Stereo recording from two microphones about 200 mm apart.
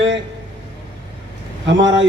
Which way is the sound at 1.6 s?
65° right (ahead or behind).